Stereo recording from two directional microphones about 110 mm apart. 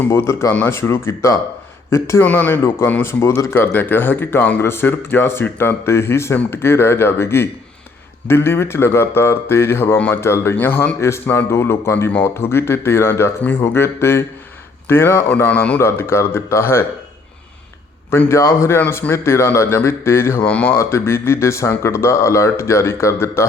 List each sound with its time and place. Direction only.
0.0 s a man's voice: 25° left (ahead or behind)
2.2 s a man's voice: 15° left (ahead or behind)
15.8 s a man's voice: 25° left (ahead or behind)
18.1 s a man's voice: 25° left (ahead or behind)
20.4 s speech: 15° left (ahead or behind)
20.7 s a man's voice: 25° left (ahead or behind)